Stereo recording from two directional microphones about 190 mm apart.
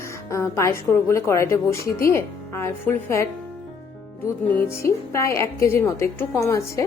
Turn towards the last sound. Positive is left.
turn(degrees=15)  # may be behind; listen again after turning